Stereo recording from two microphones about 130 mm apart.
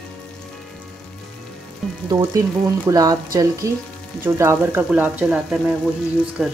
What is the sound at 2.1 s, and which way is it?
Speech, 25° right (ahead or behind).